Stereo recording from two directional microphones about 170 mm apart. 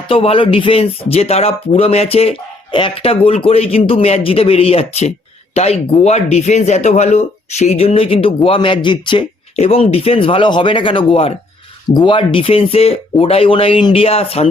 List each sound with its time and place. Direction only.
0.1 s speech: 35° left (ahead or behind)